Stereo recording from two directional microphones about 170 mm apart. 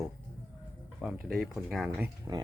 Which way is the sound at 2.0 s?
20° right (ahead or behind).